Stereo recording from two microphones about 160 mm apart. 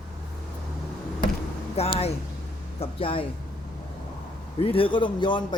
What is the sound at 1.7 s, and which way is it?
Speech, 40° left (ahead or behind).